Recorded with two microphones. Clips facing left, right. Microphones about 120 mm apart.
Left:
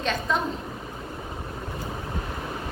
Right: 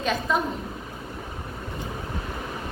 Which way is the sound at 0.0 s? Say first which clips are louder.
Right 1 dB; 5° right (ahead or behind).